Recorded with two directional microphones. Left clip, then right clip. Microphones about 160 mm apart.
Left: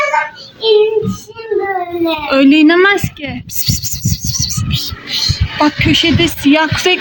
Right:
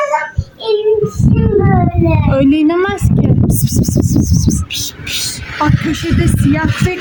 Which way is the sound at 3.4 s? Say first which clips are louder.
Right 2 dB; 10° left (ahead or behind).